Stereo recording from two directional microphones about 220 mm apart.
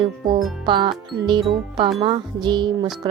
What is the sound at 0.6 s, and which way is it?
Speech, 20° right (ahead or behind).